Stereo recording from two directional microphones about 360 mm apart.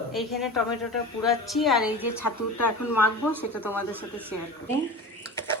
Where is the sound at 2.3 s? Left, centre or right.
Left.